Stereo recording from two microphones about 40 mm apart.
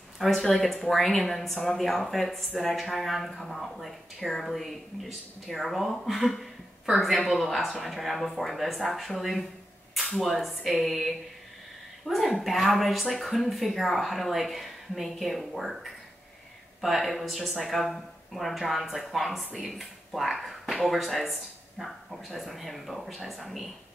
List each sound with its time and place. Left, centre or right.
0.2 s a woman's voice: centre
12.1 s a woman's voice: left
12.4 s a woman's voice: centre